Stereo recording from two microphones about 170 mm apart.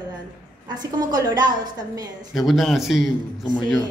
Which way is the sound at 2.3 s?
Centre (ahead or behind).